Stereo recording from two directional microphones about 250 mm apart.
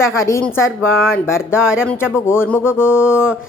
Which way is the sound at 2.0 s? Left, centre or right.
Centre.